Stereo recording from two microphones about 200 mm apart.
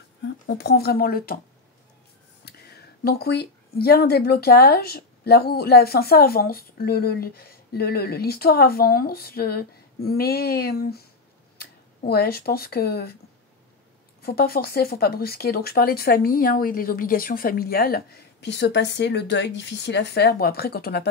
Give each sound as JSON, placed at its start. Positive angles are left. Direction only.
{"t": 0.5, "sound": "speech", "side_deg": 55}
{"t": 2.4, "sound": "speech", "side_deg": 50}
{"t": 14.2, "sound": "speech", "side_deg": 50}